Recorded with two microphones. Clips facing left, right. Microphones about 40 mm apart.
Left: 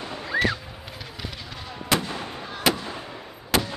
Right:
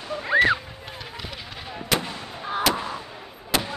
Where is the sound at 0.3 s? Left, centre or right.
Right.